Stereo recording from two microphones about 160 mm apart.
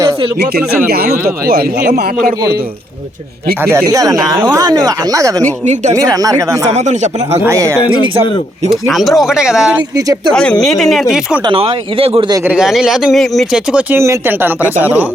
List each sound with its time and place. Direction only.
0.9 s speech: 70° right (ahead or behind)
3.6 s speech: 15° right (ahead or behind)
6.7 s speech: 45° right (ahead or behind)
7.4 s speech: 20° right (ahead or behind)
8.7 s speech: centre (ahead or behind)
11.4 s speech: 35° right (ahead or behind)
12.5 s speech: 5° right (ahead or behind)
13.9 s speech: 15° right (ahead or behind)